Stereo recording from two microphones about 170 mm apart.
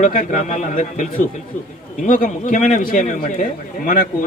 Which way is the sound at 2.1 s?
50° left (ahead or behind).